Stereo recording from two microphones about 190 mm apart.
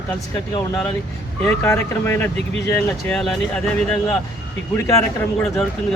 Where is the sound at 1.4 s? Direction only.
10° left (ahead or behind).